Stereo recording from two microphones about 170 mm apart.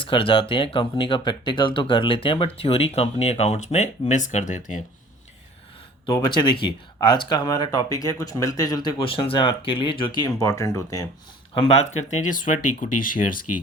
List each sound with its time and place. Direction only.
0.0 s speech: 30° left (ahead or behind); by 4.8 s 45° left (ahead or behind)
6.1 s speech: 25° left (ahead or behind)
11.5 s speech: 40° left (ahead or behind)